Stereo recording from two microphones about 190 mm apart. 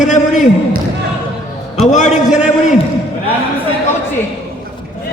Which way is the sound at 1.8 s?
40° left (ahead or behind).